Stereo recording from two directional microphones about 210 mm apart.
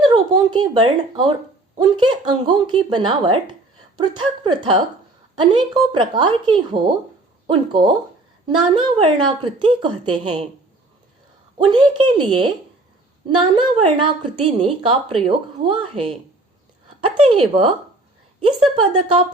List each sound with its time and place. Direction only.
0.0 s a woman's voice: 20° right (ahead or behind)
11.5 s a woman's voice: 25° right (ahead or behind)